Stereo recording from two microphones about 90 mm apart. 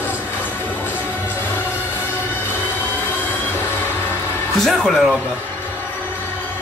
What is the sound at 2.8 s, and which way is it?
Vehicle, 20° right (ahead or behind).